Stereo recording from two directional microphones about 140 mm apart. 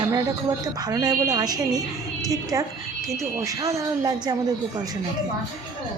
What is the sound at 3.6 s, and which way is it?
Speech, 25° right (ahead or behind).